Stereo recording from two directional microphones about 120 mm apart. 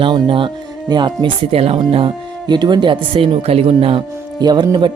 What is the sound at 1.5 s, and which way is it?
Speech, 55° right (ahead or behind).